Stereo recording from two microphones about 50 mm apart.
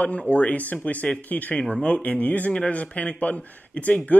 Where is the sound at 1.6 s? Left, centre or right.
Left.